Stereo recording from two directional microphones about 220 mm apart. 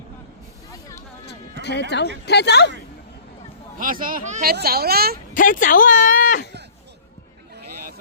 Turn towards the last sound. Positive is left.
turn(degrees=35)  # may be behind; listen again after turning